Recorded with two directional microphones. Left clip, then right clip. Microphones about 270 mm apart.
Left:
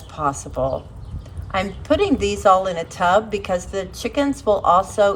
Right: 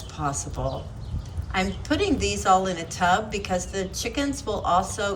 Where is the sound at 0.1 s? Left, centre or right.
Centre.